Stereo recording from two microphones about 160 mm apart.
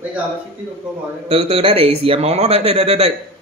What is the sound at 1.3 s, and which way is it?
Speech, 40° right (ahead or behind).